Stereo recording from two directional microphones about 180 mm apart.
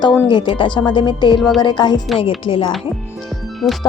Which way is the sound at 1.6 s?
25° left (ahead or behind).